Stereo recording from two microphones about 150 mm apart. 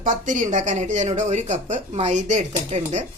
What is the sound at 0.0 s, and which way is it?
A woman's voice, 60° right (ahead or behind).